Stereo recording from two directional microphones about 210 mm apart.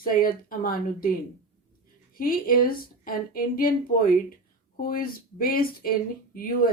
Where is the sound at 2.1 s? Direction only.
45° left (ahead or behind).